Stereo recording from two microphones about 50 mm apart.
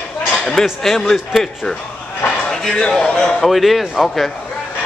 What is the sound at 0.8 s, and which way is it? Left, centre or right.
A man's voice, centre.